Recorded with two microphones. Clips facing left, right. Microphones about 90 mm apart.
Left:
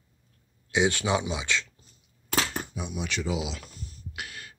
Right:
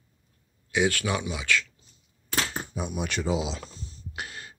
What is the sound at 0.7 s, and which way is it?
Speech, 20° left (ahead or behind).